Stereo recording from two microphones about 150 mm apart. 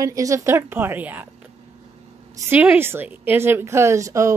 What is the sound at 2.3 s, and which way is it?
A woman's voice, 15° right (ahead or behind).